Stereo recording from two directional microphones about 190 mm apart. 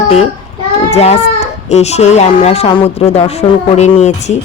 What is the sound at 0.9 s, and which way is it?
A child's voice, 35° left (ahead or behind).